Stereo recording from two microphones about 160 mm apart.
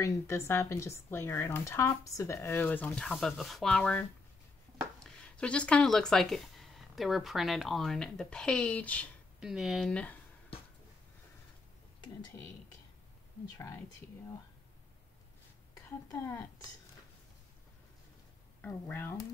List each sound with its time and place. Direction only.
0.0 s a woman's voice: 15° left (ahead or behind)
9.4 s speech: 5° right (ahead or behind)
13.6 s speech: 20° left (ahead or behind)
16.1 s a woman's voice: 20° left (ahead or behind)
18.6 s a woman's voice: 10° left (ahead or behind)